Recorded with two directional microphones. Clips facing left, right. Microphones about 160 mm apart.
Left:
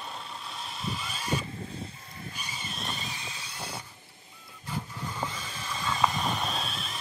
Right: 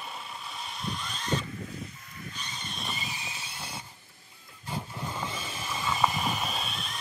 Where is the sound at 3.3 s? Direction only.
25° right (ahead or behind).